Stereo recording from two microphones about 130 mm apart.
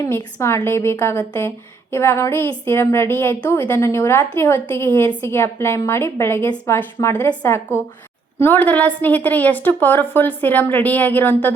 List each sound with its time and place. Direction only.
0.0 s a woman's voice: 25° left (ahead or behind)